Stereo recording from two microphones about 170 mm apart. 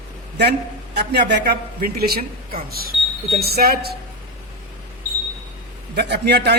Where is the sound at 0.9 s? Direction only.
80° right.